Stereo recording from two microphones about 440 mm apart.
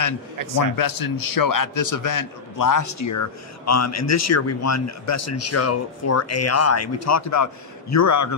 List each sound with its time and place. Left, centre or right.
0.7 s a man's voice: left